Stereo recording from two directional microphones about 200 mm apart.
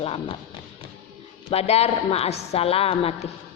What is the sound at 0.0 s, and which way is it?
Speech, 30° left (ahead or behind).